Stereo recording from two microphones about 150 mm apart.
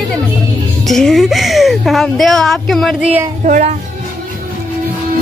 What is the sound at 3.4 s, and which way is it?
Speech, 60° right (ahead or behind).